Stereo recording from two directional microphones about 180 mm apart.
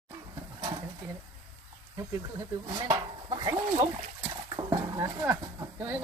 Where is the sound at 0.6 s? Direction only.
20° right (ahead or behind).